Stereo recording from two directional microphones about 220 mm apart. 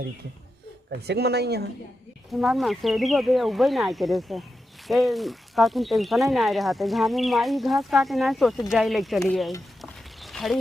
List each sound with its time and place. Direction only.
0.9 s speech: 50° right (ahead or behind)
2.3 s speech: centre (ahead or behind)
10.2 s a sound: centre (ahead or behind)